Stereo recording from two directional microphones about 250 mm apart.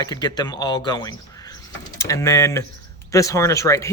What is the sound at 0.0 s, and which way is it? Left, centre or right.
Speech, centre.